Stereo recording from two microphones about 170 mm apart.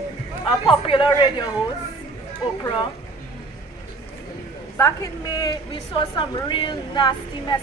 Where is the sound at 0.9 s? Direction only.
30° left (ahead or behind).